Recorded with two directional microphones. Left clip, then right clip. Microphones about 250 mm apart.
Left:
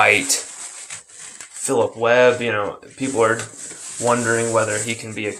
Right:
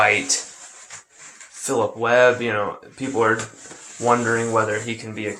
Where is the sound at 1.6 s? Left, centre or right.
Centre.